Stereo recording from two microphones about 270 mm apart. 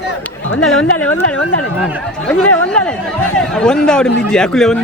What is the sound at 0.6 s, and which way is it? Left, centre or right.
Speech, centre.